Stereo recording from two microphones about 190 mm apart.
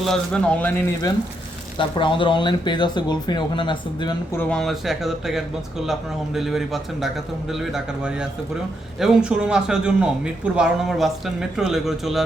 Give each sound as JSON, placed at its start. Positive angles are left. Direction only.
{"t": 0.0, "sound": "a man's voice", "side_deg": 5}
{"t": 1.8, "sound": "speech", "side_deg": 25}
{"t": 4.4, "sound": "a man's voice", "side_deg": 5}
{"t": 7.6, "sound": "a man's voice", "side_deg": -5}